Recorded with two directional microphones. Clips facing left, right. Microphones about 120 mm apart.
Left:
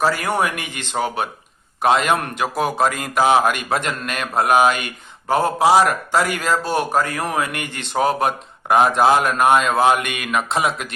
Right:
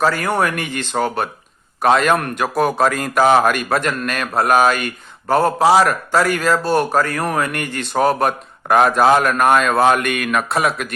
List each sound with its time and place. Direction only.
0.0 s a man's voice: 10° left (ahead or behind)